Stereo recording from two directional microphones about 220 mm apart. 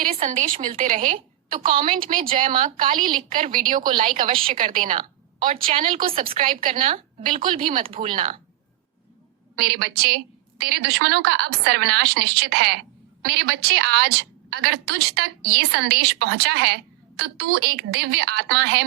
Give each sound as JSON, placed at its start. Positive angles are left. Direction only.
{"t": 0.0, "sound": "a woman's voice", "side_deg": -35}
{"t": 9.6, "sound": "a woman's voice", "side_deg": -45}